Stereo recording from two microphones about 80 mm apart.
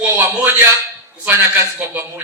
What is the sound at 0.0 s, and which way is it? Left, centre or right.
A man's voice, right.